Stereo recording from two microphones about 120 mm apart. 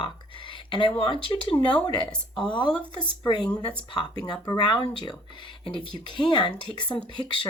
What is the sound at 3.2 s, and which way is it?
A woman's voice, 35° left (ahead or behind).